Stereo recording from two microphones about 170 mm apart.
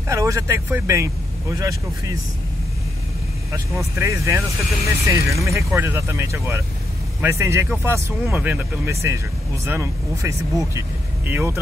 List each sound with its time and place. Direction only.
0.1 s speech: 20° right (ahead or behind)
3.5 s speech: 15° right (ahead or behind)